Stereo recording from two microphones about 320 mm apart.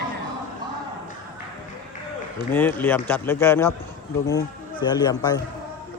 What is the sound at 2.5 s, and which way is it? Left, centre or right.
Speech, centre.